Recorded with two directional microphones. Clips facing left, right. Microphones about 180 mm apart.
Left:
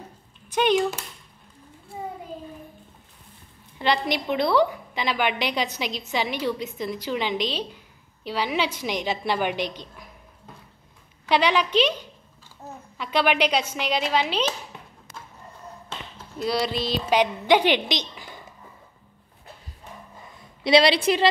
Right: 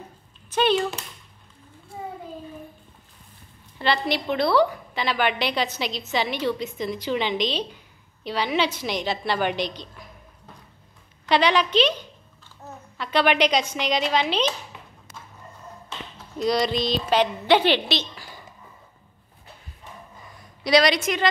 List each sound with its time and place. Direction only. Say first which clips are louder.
0.5 s speech: even; 15° left (ahead or behind)
3.7 s a woman's voice: even; 15° left (ahead or behind)
11.2 s a woman's voice: right 1 dB; 10° left (ahead or behind)
12.9 s a woman's voice: right 1 dB; 10° left (ahead or behind)
16.3 s a woman's voice: right 3 dB; 5° left (ahead or behind)
20.6 s a woman's voice: left 1 dB; 25° left (ahead or behind)